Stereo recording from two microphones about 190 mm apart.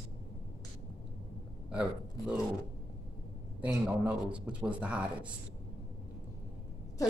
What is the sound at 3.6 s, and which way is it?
A man's voice, 5° right (ahead or behind).